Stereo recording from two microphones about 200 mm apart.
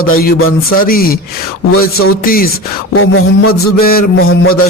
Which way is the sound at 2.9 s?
90° left.